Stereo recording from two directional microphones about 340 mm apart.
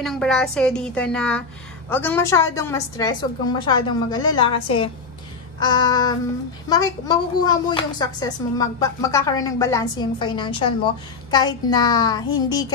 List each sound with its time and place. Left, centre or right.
0.0 s a woman's voice: centre